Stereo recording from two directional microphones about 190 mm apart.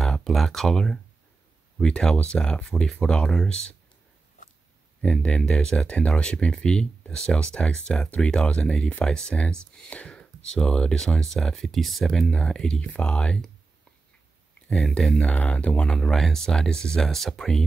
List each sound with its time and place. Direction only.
0.0 s speech: centre (ahead or behind)
5.0 s speech: 5° left (ahead or behind)
14.7 s speech: 5° left (ahead or behind)